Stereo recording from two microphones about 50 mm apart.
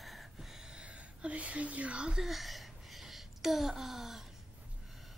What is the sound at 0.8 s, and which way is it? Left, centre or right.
Speech, right.